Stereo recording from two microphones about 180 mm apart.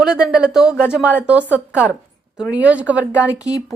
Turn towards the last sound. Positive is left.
turn(degrees=15)  # may be behind; listen again after turning